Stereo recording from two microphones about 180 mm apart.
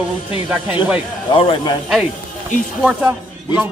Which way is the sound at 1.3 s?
30° left (ahead or behind).